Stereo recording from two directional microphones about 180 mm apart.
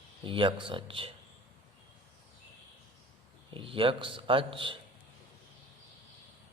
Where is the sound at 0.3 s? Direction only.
30° right (ahead or behind).